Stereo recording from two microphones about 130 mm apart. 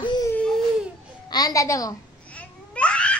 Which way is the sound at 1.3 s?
30° left (ahead or behind).